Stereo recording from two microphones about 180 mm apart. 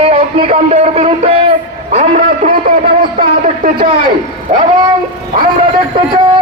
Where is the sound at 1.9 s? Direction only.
45° right (ahead or behind).